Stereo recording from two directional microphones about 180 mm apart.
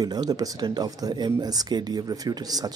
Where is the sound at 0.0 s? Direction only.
20° right (ahead or behind).